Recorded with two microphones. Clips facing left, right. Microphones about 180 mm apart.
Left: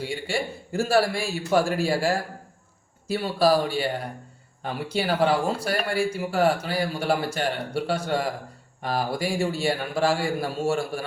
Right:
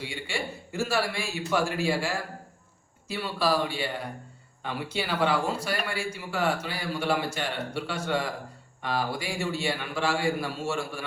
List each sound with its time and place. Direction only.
0.0 s a man's voice: 35° left (ahead or behind)
3.2 s a man's voice: 35° left (ahead or behind)